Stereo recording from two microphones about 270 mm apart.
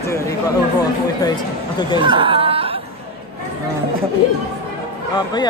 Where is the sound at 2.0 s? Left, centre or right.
Centre.